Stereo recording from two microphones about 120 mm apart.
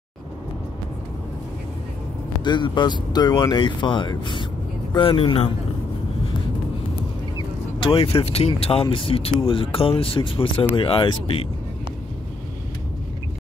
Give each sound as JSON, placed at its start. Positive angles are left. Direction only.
{"t": 2.4, "sound": "speech", "side_deg": 40}
{"t": 7.3, "sound": "speech", "side_deg": 45}